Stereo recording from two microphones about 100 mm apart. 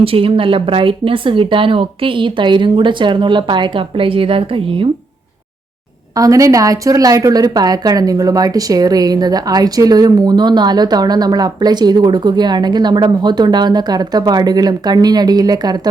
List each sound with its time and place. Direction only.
0.0 s speech: 65° right (ahead or behind)
6.1 s a woman's voice: 35° right (ahead or behind)